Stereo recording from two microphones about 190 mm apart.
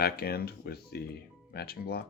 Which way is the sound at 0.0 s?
55° left (ahead or behind).